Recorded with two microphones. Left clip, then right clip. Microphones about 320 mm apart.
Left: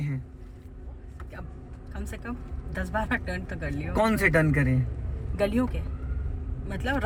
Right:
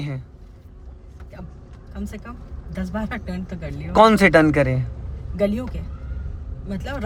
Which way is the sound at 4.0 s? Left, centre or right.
Centre.